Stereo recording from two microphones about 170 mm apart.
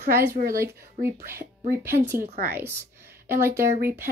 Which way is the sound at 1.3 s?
15° right (ahead or behind).